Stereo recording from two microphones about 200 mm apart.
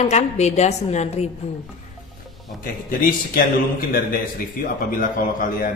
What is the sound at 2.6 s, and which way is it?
A man's voice, 45° left (ahead or behind).